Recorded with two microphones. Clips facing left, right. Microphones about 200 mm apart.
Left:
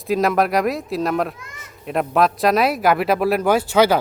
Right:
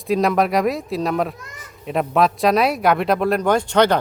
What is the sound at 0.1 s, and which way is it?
Speech, centre (ahead or behind).